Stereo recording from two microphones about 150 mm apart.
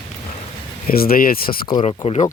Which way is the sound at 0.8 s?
85° left.